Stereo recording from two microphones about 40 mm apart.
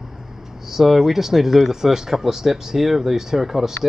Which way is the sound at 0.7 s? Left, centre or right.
Centre.